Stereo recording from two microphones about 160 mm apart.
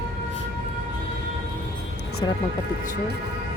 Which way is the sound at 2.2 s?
25° left (ahead or behind).